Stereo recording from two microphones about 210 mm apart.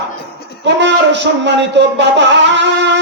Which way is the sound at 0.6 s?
55° right (ahead or behind).